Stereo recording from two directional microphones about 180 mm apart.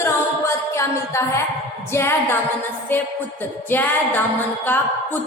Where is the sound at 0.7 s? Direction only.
15° left (ahead or behind).